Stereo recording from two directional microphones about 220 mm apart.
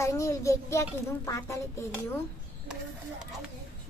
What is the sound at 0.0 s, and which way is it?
A child's voice, 15° left (ahead or behind).